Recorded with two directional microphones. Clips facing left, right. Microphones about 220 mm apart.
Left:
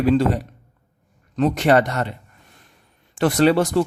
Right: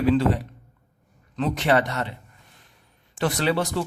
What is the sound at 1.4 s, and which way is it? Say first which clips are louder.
Speech: left 5 dB; 45° left (ahead or behind).